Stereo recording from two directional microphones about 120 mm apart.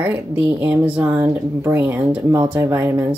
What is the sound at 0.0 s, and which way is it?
Speech, 15° right (ahead or behind).